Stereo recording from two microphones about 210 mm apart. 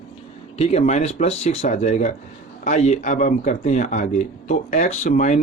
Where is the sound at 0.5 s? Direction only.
30° left (ahead or behind).